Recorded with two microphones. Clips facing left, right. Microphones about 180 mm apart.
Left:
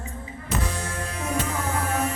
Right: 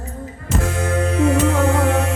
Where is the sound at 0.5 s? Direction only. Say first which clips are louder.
Right 10 dB; 55° right (ahead or behind); by 2.1 s 75° right (ahead or behind).